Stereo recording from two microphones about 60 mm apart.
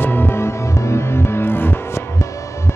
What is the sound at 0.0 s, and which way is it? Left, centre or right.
Music, left.